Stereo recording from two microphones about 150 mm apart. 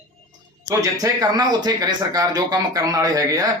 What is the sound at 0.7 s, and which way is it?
Speech, 25° right (ahead or behind).